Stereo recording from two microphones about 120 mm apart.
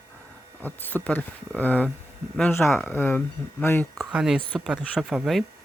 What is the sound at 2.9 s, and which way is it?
Speech, 15° left (ahead or behind).